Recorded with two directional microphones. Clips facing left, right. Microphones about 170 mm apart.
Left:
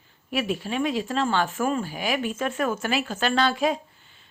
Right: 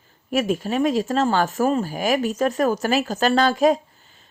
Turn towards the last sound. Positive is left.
turn(degrees=-40)  # may be behind; listen again after turning